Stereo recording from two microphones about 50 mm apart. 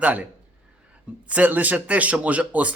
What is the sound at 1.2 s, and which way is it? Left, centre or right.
Speech, right.